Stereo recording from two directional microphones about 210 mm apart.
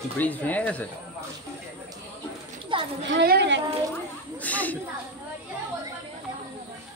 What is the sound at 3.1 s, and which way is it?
Speech, 55° right (ahead or behind).